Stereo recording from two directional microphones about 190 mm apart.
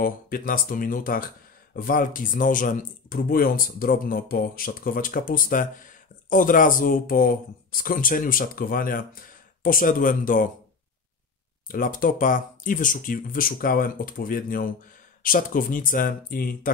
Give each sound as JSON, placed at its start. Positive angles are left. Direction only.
{"t": 0.0, "sound": "speech", "side_deg": 50}
{"t": 11.6, "sound": "speech", "side_deg": 45}